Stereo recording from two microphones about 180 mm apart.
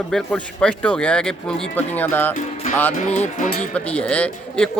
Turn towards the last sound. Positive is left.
turn(degrees=5)  # may be behind; listen again after turning